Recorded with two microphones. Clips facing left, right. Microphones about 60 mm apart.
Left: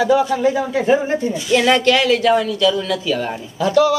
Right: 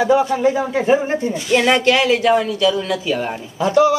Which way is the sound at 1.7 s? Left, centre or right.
Centre.